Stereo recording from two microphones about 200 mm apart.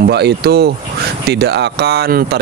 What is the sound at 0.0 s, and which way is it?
Speech, 55° right (ahead or behind).